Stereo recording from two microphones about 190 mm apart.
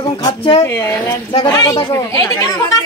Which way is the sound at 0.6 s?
15° left (ahead or behind).